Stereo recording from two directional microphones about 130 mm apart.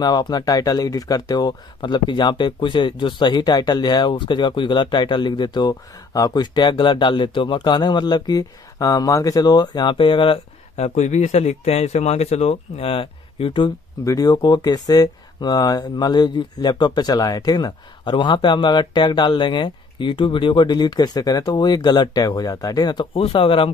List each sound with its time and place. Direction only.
0.0 s speech: 30° left (ahead or behind)
11.0 s speech: 65° left (ahead or behind); by 13.7 s 40° left (ahead or behind)
14.0 s speech: 30° left (ahead or behind)
23.2 s speech: 45° left (ahead or behind)